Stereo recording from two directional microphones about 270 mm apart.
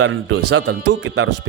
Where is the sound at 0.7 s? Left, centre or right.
Right.